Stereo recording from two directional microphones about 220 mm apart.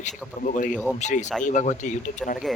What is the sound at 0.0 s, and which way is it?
Speech, 35° left (ahead or behind).